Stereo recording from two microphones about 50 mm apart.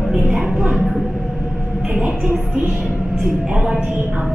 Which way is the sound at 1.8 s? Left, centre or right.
Centre.